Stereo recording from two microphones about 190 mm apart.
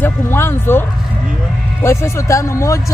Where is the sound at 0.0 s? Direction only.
10° left (ahead or behind).